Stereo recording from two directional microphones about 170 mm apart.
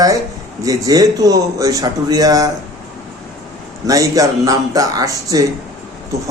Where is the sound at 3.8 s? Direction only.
20° right (ahead or behind).